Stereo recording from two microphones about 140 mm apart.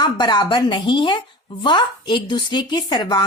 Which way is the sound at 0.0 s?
30° left (ahead or behind).